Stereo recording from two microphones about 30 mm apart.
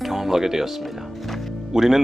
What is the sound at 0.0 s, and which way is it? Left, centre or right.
Music, centre.